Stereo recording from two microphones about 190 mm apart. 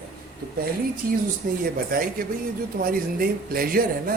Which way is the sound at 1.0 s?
50° right (ahead or behind).